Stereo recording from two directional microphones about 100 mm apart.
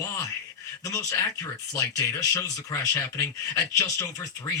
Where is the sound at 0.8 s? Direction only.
30° left (ahead or behind).